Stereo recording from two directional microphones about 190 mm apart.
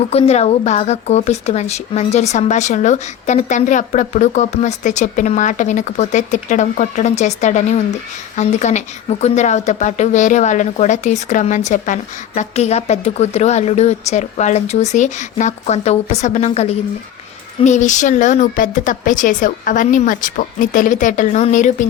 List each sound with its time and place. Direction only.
0.1 s a woman's voice: 35° left (ahead or behind)